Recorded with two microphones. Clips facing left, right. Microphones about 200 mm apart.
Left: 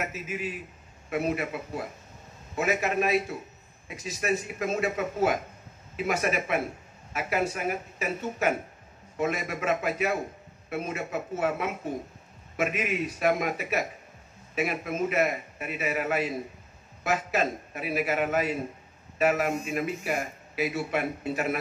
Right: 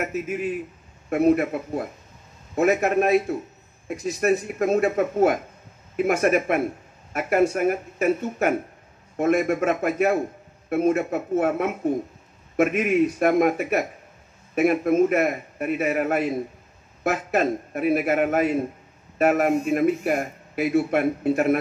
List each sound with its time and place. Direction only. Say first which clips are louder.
0.0 s speech: right 7 dB; 50° right (ahead or behind)